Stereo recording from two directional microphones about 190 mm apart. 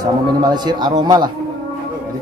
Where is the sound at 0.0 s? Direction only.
20° right (ahead or behind).